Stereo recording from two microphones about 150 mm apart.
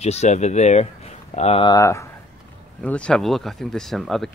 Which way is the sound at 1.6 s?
25° left (ahead or behind).